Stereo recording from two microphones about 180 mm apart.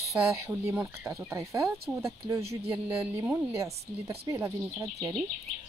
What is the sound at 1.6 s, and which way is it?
Speech, centre (ahead or behind).